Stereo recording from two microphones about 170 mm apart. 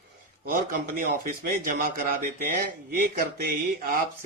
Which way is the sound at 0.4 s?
55° right (ahead or behind).